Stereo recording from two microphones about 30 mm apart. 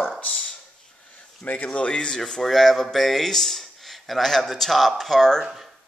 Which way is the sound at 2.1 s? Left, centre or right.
Left.